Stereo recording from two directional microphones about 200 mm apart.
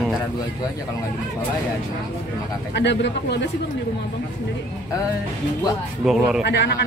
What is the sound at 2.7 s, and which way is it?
Speech, 60° left (ahead or behind).